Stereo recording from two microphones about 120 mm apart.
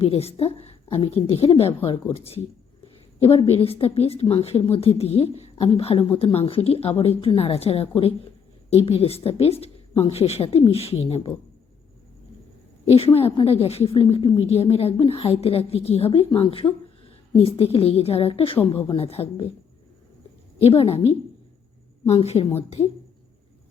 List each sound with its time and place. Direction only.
0.0 s a woman's voice: 55° left (ahead or behind)
13.1 s a woman's voice: 50° left (ahead or behind)
20.6 s a woman's voice: 55° left (ahead or behind)